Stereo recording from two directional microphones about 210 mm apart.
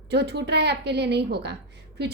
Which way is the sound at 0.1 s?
50° right (ahead or behind).